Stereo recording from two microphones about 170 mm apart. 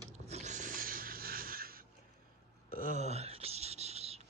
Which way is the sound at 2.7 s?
50° right (ahead or behind).